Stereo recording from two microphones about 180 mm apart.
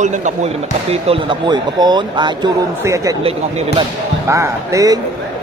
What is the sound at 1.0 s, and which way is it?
Speech, 30° right (ahead or behind).